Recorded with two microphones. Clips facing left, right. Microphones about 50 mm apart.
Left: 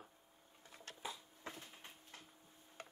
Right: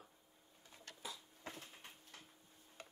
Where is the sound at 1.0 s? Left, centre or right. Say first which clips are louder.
Left 3 dB; left.